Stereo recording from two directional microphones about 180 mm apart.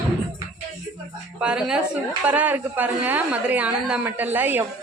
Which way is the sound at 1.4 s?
5° right (ahead or behind).